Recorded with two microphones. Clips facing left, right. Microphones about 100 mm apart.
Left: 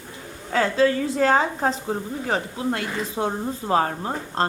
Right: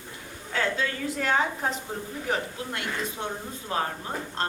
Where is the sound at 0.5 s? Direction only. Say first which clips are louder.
Left 9 dB; 35° left (ahead or behind).